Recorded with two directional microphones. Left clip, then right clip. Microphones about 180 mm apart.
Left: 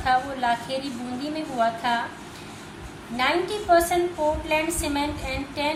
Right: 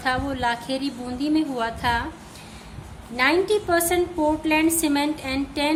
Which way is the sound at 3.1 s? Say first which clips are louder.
Right 4 dB; 55° right (ahead or behind).